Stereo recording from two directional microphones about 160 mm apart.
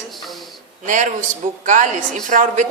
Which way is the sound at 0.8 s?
55° right (ahead or behind).